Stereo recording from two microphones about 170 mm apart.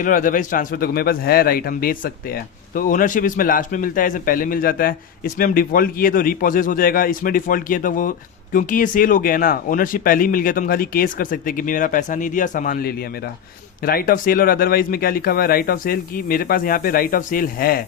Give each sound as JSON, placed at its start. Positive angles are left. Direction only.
{"t": 0.0, "sound": "speech", "side_deg": 50}